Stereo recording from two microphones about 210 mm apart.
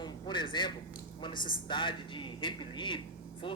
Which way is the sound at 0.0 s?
20° left (ahead or behind).